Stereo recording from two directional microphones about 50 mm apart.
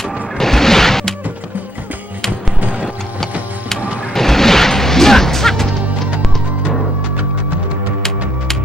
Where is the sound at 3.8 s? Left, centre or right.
Right.